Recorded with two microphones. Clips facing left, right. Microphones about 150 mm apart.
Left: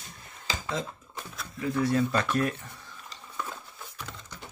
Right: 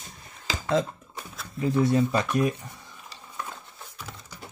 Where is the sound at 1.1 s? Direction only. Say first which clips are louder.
Left 1 dB; centre (ahead or behind).